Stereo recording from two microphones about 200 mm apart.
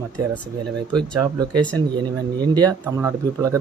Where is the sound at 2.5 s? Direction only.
20° right (ahead or behind).